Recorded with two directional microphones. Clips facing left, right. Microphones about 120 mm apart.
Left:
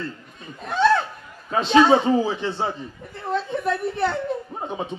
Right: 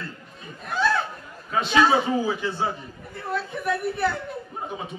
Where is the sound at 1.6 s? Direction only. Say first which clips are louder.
Left 4 dB; 30° left (ahead or behind).